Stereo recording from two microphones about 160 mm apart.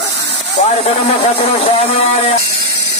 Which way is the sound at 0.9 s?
45° left (ahead or behind).